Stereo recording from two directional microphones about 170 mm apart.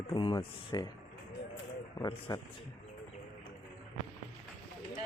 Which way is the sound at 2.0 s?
25° left (ahead or behind).